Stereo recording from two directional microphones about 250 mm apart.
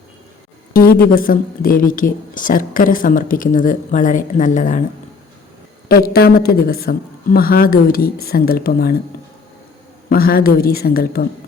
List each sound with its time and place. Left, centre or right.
0.7 s a woman's voice: left
5.9 s a woman's voice: left
10.1 s a woman's voice: left